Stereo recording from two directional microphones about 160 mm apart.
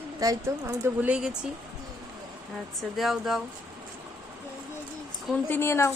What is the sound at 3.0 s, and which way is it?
Speech, centre (ahead or behind).